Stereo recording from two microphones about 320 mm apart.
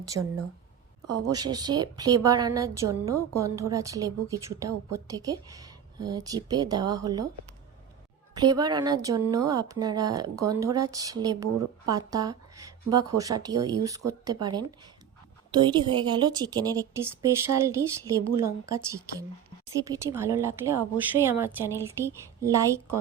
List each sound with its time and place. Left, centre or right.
0.1 s a woman's voice: right
1.4 s a woman's voice: centre
3.1 s a woman's voice: right
3.4 s a woman's voice: centre
8.4 s a woman's voice: centre